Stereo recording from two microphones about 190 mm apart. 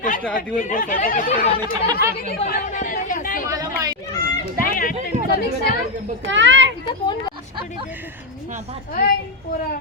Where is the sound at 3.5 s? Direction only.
20° right (ahead or behind).